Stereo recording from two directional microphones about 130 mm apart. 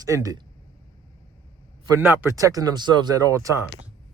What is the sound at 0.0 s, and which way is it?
Speech, 25° right (ahead or behind).